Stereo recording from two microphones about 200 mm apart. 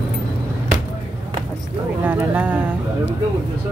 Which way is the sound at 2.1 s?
5° right (ahead or behind).